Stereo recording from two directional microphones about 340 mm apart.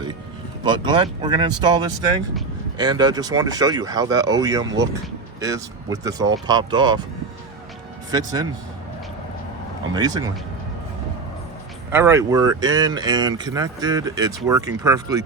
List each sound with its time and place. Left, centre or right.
0.6 s speech: centre
8.1 s speech: centre
9.9 s speech: centre
11.9 s speech: centre